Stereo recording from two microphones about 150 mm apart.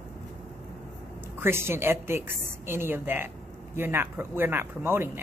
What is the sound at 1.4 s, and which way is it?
A woman's voice, 15° right (ahead or behind).